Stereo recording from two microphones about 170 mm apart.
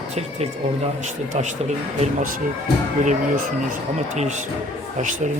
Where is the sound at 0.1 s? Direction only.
40° right (ahead or behind).